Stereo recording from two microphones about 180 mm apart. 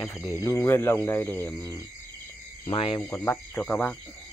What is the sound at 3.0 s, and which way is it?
Speech, 15° left (ahead or behind).